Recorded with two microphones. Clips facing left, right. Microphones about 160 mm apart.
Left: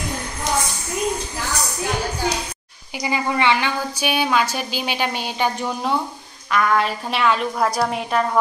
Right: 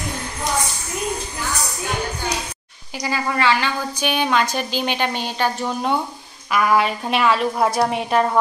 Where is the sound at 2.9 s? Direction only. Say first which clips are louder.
Left 1 dB; 15° left (ahead or behind).